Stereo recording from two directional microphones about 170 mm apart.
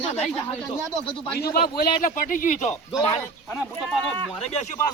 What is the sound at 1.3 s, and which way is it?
A man's voice, 65° left (ahead or behind).